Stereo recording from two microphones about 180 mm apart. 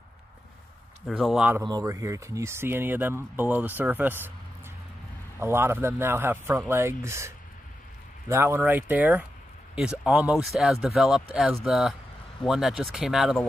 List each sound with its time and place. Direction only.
1.0 s speech: centre (ahead or behind)
1.6 s speech: 20° right (ahead or behind)
5.4 s speech: 15° right (ahead or behind)